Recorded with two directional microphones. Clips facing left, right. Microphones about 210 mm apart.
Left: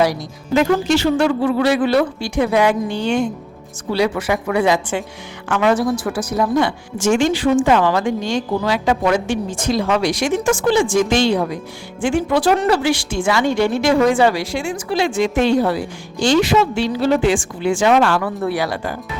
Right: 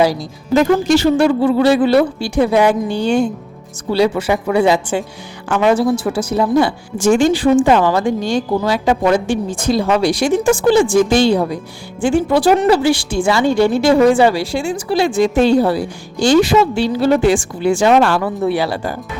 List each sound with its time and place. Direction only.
0.0 s speech: 30° right (ahead or behind)
0.6 s a woman's voice: 40° right (ahead or behind); by 8.0 s 25° right (ahead or behind)
8.0 s a woman's voice: 35° right (ahead or behind)